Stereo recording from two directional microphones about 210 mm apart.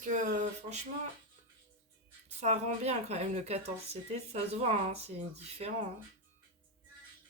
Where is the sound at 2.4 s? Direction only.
30° right (ahead or behind).